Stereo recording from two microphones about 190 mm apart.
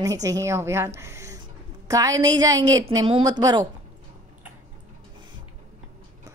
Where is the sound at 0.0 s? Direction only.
15° right (ahead or behind).